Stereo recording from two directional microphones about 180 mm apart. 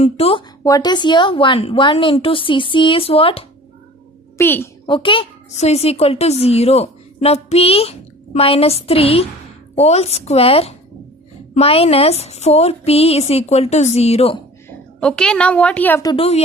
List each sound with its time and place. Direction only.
0.0 s a woman's voice: 30° left (ahead or behind)
0.6 s a woman's voice: 20° left (ahead or behind)
4.4 s a woman's voice: 10° left (ahead or behind)
4.9 s a woman's voice: 30° left (ahead or behind)
15.0 s a woman's voice: 5° left (ahead or behind)
16.0 s a woman's voice: 30° left (ahead or behind)